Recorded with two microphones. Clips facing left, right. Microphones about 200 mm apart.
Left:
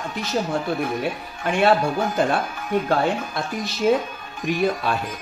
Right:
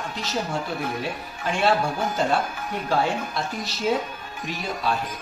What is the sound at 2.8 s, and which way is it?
Speech, 55° left (ahead or behind).